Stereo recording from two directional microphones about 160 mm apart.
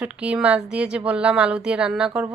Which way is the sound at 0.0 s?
5° right (ahead or behind).